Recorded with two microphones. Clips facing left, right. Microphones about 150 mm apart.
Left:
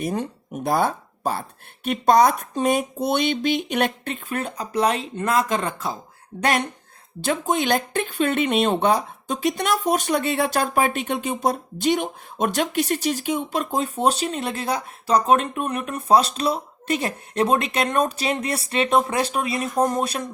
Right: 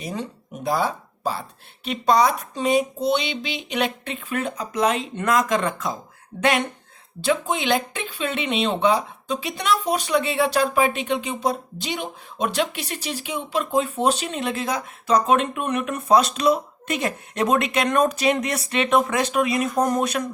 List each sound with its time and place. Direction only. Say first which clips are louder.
0.0 s speech: left 4 dB; 55° left (ahead or behind); by 20.2 s 35° left (ahead or behind)